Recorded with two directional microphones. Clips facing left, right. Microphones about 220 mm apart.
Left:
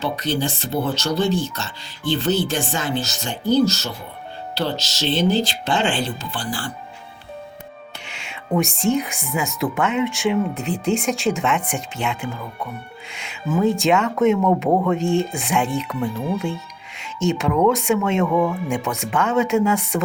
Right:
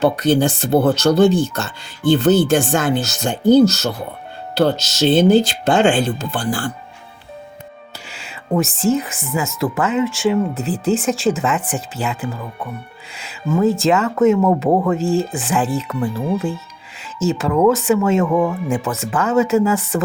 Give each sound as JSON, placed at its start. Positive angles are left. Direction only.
{"t": 0.0, "sound": "speech", "side_deg": -50}
{"t": 8.0, "sound": "speech", "side_deg": -5}
{"t": 18.3, "sound": "speech", "side_deg": -15}
{"t": 18.7, "sound": "speech", "side_deg": -5}